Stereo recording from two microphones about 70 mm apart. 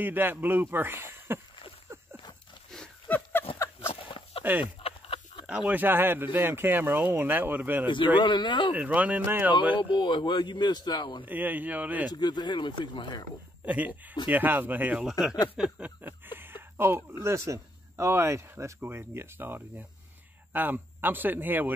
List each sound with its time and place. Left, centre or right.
0.0 s speech: right
3.1 s a sound: centre
3.5 s a sound: left
4.5 s speech: right
8.2 s speech: left
8.7 s speech: right
9.9 s speech: left
11.2 s speech: right
12.1 s speech: left
13.7 s speech: right
15.0 s a sound: centre
16.0 s a sound: right
17.2 s speech: right